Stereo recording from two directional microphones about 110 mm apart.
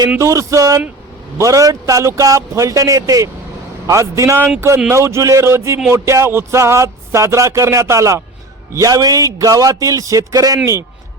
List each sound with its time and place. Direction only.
0.2 s a man's voice: 30° right (ahead or behind)